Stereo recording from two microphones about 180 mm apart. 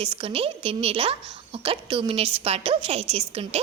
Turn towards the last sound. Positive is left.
turn(degrees=-35)  # may be behind; listen again after turning